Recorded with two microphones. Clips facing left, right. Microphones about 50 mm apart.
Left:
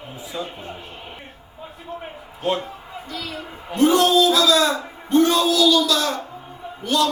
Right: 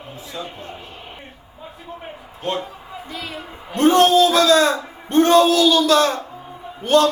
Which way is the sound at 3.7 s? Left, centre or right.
Right.